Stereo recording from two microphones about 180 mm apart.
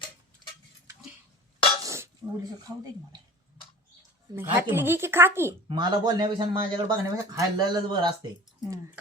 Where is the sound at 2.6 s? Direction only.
20° right (ahead or behind).